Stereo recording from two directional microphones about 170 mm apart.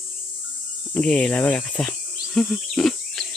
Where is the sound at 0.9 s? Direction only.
5° left (ahead or behind).